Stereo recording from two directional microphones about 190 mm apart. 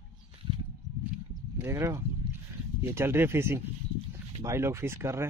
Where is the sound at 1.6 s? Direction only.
15° right (ahead or behind).